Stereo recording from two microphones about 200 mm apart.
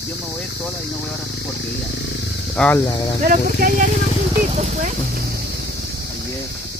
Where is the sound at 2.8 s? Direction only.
15° left (ahead or behind).